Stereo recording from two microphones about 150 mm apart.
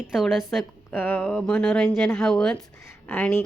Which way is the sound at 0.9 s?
15° left (ahead or behind).